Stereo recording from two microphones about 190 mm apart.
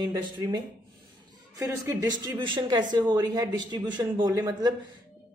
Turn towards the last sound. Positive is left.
turn(degrees=-20)  # may be behind; listen again after turning